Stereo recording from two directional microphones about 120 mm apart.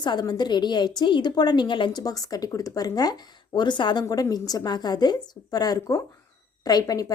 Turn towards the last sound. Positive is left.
turn(degrees=30)  # may be behind; listen again after turning